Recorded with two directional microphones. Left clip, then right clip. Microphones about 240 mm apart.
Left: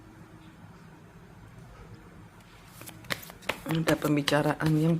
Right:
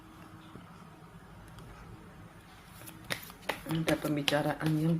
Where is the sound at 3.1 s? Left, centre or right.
Left.